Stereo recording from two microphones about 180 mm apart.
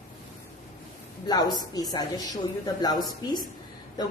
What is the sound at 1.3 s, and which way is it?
A woman's voice, 20° left (ahead or behind).